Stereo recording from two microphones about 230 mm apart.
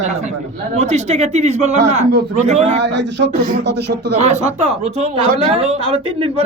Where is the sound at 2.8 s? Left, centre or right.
Right.